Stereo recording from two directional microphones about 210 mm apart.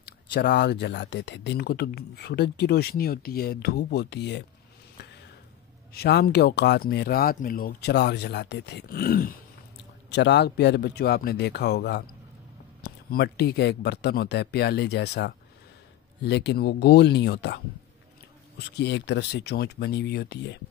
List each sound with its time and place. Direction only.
0.0 s speech: 50° left (ahead or behind)
5.9 s speech: 50° left (ahead or behind)
10.0 s speech: 55° left (ahead or behind)
18.6 s speech: 55° left (ahead or behind)